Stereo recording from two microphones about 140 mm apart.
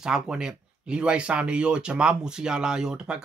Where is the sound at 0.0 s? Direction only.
5° right (ahead or behind).